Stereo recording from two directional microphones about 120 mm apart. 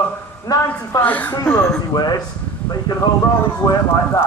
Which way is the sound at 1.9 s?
35° left (ahead or behind).